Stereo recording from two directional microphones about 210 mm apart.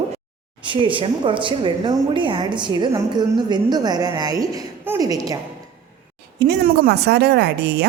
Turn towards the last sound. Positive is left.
turn(degrees=-50)  # may be behind; listen again after turning